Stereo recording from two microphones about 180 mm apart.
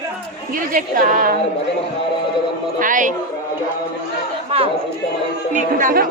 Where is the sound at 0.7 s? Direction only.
55° right (ahead or behind).